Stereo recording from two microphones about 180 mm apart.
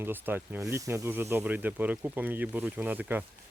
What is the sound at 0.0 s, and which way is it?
Speech, 10° right (ahead or behind).